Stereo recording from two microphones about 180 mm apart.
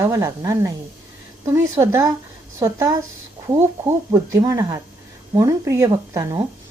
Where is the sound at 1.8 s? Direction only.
15° right (ahead or behind).